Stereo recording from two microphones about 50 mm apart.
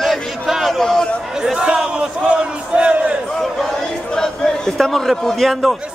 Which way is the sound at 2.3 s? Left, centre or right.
Right.